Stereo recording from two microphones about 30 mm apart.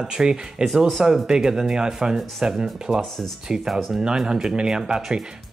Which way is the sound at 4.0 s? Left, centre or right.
Right.